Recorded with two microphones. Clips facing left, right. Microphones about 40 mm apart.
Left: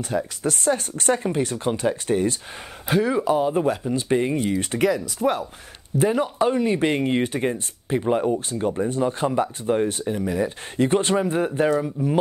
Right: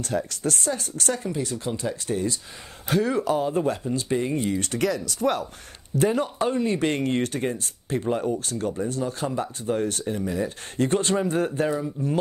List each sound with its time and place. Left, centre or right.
0.1 s speech: centre
0.7 s speech: left
2.9 s speech: centre
4.4 s speech: centre
5.2 s speech: centre; by 12.2 s left